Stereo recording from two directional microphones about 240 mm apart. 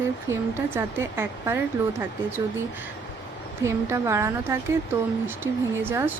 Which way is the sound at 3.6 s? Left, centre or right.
Centre.